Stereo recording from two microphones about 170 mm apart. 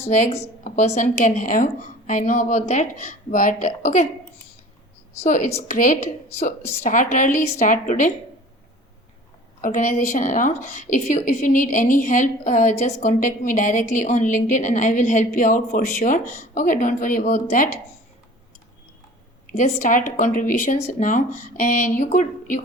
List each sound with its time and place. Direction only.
0.1 s a woman's voice: 45° left (ahead or behind)
5.2 s a woman's voice: 45° left (ahead or behind)
9.6 s a woman's voice: 50° left (ahead or behind)
19.5 s a woman's voice: 50° left (ahead or behind)